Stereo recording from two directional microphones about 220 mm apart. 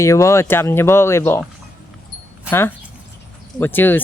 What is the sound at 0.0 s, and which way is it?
Speech, 15° left (ahead or behind).